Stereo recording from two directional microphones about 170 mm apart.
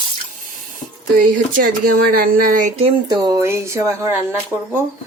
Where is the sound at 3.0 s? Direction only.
25° right (ahead or behind).